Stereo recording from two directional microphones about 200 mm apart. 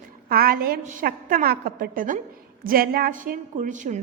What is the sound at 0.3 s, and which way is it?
A woman's voice, 45° right (ahead or behind).